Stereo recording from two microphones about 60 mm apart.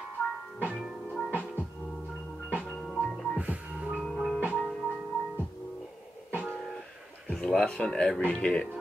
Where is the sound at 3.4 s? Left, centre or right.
Right.